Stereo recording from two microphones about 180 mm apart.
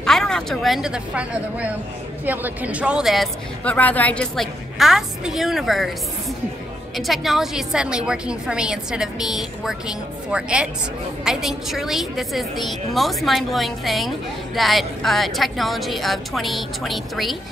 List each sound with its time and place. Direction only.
0.0 s a woman's voice: centre (ahead or behind)
7.0 s a woman's voice: centre (ahead or behind)